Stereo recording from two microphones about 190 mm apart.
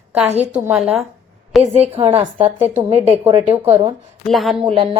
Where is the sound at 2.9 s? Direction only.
30° right (ahead or behind).